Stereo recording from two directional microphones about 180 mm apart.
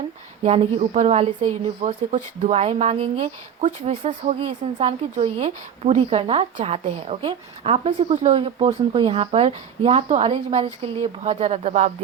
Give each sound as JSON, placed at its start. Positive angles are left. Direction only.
{"t": 0.4, "sound": "speech", "side_deg": -35}